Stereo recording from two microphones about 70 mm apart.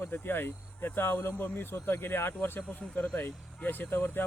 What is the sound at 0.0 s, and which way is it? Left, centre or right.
Speech, left.